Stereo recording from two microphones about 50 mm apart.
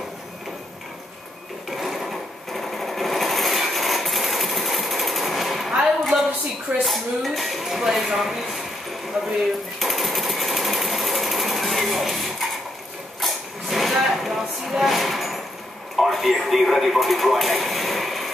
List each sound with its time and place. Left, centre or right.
1.8 s sewing machine: centre
6.8 s speech: centre
9.8 s sewing machine: centre
13.2 s a sound: centre
13.9 s music: centre
16.0 s speech: centre